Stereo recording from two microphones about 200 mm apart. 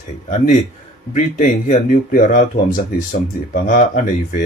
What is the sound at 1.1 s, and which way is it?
Speech, 40° left (ahead or behind).